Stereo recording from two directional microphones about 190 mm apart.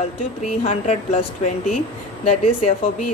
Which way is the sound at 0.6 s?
35° left (ahead or behind).